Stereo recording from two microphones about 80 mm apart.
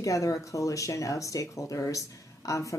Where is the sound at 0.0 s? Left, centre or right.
Left.